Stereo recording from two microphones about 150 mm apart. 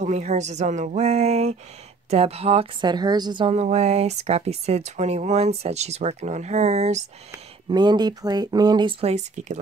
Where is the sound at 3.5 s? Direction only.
45° right (ahead or behind).